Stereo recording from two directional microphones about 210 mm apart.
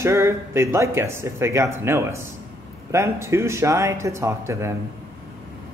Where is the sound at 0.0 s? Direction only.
10° right (ahead or behind).